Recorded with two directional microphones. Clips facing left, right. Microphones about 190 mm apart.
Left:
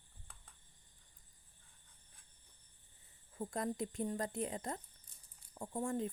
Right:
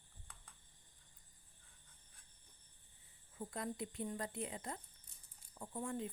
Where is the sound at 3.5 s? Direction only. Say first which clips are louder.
Left 5 dB; 45° left (ahead or behind).